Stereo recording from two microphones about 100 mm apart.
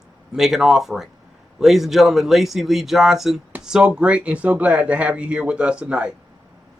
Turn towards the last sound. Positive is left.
turn(degrees=-10)  # may be behind; listen again after turning